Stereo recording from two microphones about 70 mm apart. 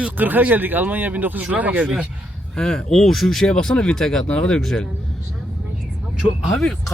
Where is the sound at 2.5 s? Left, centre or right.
Centre.